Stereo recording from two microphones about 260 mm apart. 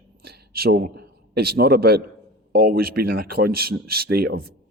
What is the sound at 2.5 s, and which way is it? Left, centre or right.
Speech, right.